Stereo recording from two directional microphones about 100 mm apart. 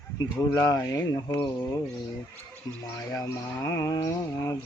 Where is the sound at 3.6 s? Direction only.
30° left (ahead or behind).